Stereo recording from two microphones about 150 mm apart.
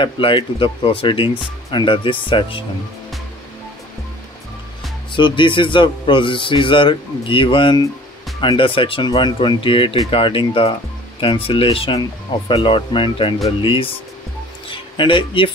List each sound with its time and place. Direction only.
0.0 s a man's voice: 35° left (ahead or behind)
5.1 s a man's voice: 35° left (ahead or behind)